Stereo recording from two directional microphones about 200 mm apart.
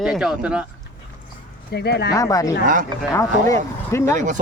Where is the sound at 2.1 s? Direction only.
15° left (ahead or behind).